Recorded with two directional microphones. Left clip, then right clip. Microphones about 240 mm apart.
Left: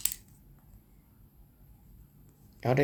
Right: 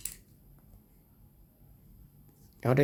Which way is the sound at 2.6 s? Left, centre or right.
Centre.